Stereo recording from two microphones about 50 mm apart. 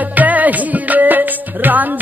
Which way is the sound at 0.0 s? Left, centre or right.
Right.